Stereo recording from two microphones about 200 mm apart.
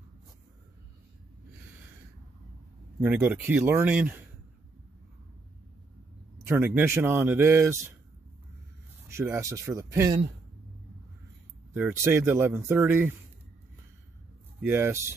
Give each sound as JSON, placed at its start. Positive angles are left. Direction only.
{"t": 3.0, "sound": "speech", "side_deg": -10}
{"t": 6.4, "sound": "speech", "side_deg": -10}
{"t": 9.1, "sound": "speech", "side_deg": -15}
{"t": 11.7, "sound": "speech", "side_deg": -10}
{"t": 14.6, "sound": "speech", "side_deg": -10}